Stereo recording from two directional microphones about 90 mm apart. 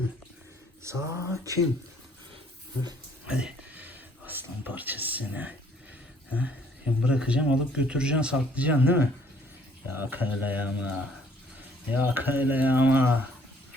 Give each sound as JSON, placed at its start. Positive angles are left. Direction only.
{"t": 0.9, "sound": "a sound", "side_deg": -30}
{"t": 3.2, "sound": "speech", "side_deg": -10}
{"t": 7.0, "sound": "speech", "side_deg": -10}